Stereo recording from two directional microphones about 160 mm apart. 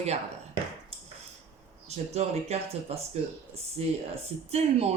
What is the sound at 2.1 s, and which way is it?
Speech, 40° right (ahead or behind).